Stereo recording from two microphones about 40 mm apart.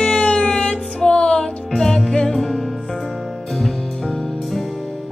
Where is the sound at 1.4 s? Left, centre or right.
Centre.